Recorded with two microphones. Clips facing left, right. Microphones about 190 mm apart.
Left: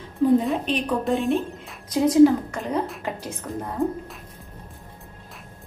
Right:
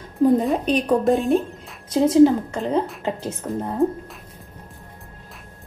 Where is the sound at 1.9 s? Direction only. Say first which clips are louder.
Right 1 dB; 25° right (ahead or behind).